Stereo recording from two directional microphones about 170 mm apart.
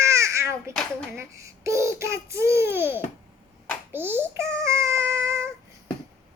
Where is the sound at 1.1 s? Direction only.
15° right (ahead or behind).